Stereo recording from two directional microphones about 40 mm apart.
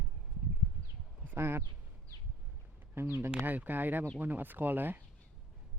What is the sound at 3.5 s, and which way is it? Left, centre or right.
Speech, right.